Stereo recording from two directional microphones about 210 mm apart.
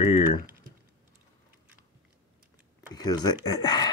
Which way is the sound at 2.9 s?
20° left (ahead or behind).